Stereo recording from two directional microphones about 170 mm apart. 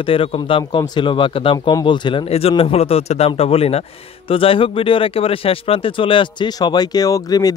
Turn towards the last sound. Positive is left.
turn(degrees=20)  # may be behind; listen again after turning